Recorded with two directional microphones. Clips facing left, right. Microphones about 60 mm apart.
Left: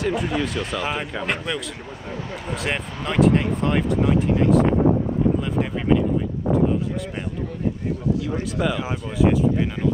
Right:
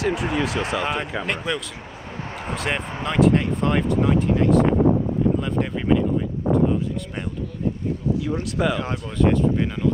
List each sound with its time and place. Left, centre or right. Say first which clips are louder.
0.0 s speech: even; centre
8.2 s speech: right 1 dB; centre